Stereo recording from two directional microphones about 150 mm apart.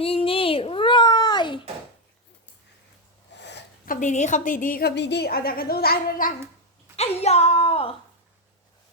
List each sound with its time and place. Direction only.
0.0 s a sound: 40° left (ahead or behind)
3.8 s a woman's voice: 55° left (ahead or behind); by 6.3 s 80° left
6.9 s speech: 45° left (ahead or behind)